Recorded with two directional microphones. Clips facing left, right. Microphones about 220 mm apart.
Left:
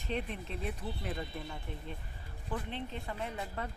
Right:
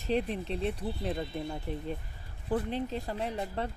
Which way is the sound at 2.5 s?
40° right (ahead or behind).